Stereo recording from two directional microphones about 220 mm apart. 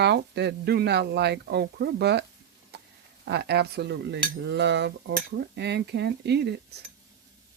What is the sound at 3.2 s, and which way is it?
Speech, 50° right (ahead or behind).